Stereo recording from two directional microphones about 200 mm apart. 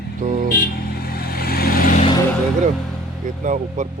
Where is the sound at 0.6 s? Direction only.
50° left (ahead or behind).